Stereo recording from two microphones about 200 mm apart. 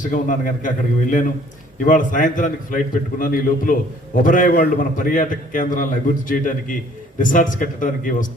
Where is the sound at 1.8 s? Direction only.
40° left (ahead or behind).